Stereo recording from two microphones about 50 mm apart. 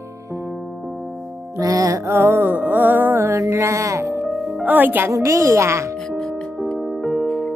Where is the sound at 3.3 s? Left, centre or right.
Right.